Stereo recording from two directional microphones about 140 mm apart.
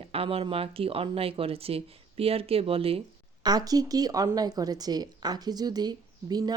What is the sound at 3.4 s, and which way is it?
A woman's voice, 25° right (ahead or behind).